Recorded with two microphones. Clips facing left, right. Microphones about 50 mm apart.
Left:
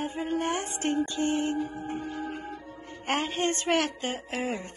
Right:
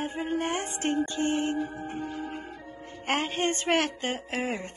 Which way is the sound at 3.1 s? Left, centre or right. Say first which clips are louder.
Even; right.